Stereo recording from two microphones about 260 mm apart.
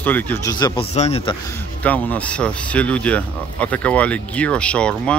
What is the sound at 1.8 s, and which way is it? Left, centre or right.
Speech, centre.